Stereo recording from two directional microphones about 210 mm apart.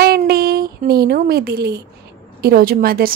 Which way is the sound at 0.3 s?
45° right (ahead or behind).